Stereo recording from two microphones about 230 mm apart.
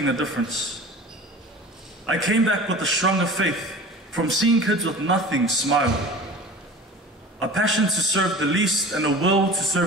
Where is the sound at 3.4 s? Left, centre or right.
Right.